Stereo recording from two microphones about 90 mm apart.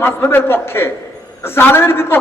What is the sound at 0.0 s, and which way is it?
A man's voice, 20° left (ahead or behind).